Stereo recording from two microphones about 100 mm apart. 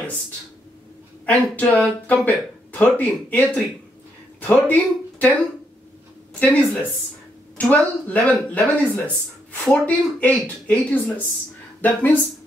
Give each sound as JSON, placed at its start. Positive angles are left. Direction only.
{"t": 1.2, "sound": "speech", "side_deg": 15}
{"t": 6.4, "sound": "speech", "side_deg": 15}